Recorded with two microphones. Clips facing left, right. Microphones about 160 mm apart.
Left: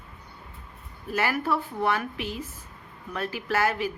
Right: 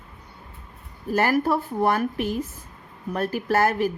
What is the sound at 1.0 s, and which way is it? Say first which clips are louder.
Speech: right 5 dB; 40° right (ahead or behind).